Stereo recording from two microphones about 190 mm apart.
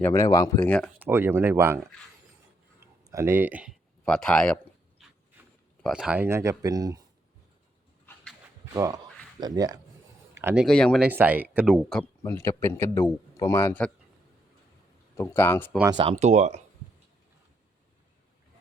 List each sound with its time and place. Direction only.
0.0 s speech: 15° left (ahead or behind)
0.9 s speech: 10° right (ahead or behind)
2.8 s speech: 15° right (ahead or behind)
4.0 s a sound: 5° left (ahead or behind)
5.4 s a sound: 10° right (ahead or behind)
5.8 s speech: 5° right (ahead or behind)
8.0 s a sound: 5° left (ahead or behind)
8.7 s speech: 20° right (ahead or behind)
10.3 s speech: 10° right (ahead or behind)
12.2 s speech: 15° left (ahead or behind)
15.1 s speech: 15° left (ahead or behind)
15.8 s speech: 20° right (ahead or behind)
16.1 s speech: 35° right (ahead or behind)